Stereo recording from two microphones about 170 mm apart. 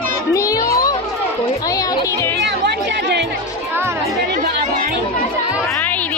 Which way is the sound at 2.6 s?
75° right (ahead or behind).